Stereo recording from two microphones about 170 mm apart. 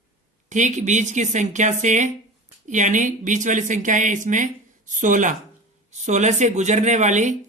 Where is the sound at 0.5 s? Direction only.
45° right (ahead or behind).